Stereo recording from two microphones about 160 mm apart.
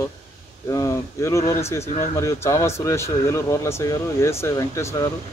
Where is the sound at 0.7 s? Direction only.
20° left (ahead or behind).